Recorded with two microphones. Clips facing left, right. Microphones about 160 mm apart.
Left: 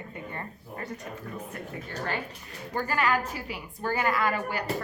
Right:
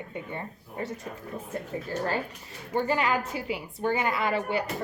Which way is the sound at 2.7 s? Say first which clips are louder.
Right 1 dB; 25° right (ahead or behind).